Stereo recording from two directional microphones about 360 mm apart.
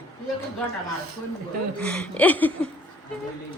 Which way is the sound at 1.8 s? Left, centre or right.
Centre.